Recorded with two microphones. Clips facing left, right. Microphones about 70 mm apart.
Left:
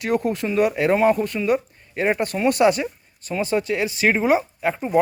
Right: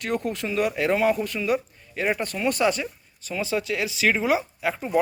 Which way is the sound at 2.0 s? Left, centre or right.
Left.